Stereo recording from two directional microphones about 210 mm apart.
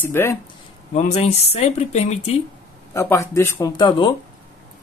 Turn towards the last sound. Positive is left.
turn(degrees=20)  # may be behind; listen again after turning